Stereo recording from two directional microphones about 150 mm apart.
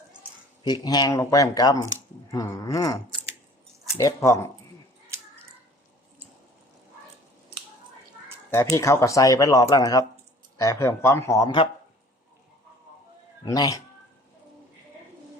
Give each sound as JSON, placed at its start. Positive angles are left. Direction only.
{"t": 0.6, "sound": "speech", "side_deg": 30}
{"t": 8.7, "sound": "speech", "side_deg": 20}
{"t": 13.4, "sound": "speech", "side_deg": 25}